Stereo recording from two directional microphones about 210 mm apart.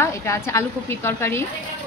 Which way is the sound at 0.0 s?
15° left (ahead or behind).